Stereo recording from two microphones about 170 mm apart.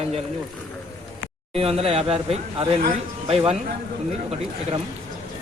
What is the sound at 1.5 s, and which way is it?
A man's voice, 35° right (ahead or behind).